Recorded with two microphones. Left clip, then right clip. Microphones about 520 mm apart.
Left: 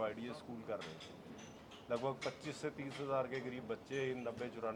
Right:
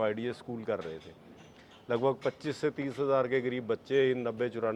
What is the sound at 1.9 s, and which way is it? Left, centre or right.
A man's voice, right.